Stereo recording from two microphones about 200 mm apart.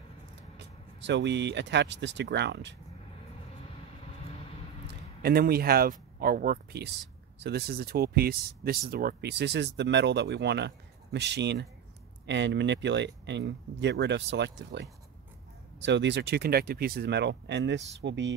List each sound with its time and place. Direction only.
1.0 s speech: 60° right (ahead or behind)
5.2 s speech: 50° right (ahead or behind)